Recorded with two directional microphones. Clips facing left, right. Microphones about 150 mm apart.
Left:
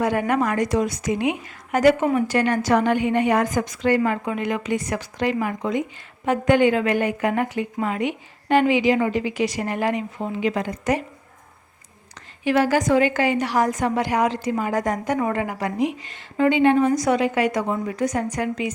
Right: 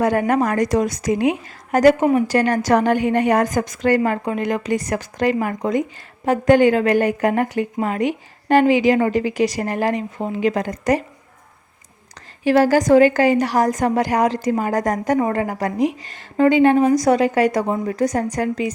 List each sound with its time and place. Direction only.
0.0 s a woman's voice: 45° right (ahead or behind)
12.5 s a woman's voice: 40° right (ahead or behind)